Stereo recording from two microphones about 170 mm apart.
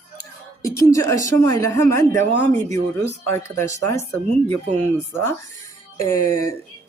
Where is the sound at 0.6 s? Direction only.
20° left (ahead or behind).